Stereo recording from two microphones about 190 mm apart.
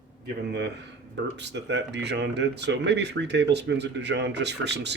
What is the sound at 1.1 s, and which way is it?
Speech, 65° right (ahead or behind).